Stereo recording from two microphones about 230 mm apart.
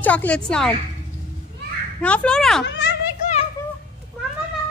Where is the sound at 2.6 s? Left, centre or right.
Left.